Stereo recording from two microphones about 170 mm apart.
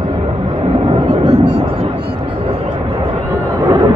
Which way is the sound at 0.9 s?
35° right (ahead or behind).